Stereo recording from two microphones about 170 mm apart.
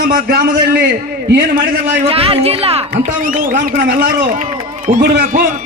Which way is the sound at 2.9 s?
55° right (ahead or behind).